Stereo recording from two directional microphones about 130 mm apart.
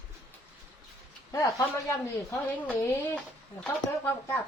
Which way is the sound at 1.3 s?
25° left (ahead or behind).